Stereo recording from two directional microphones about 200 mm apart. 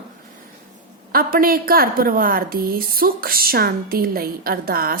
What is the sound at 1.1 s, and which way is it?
A woman's voice, 45° right (ahead or behind).